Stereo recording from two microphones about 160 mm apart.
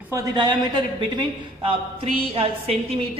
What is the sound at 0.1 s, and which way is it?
A woman's voice, 25° right (ahead or behind).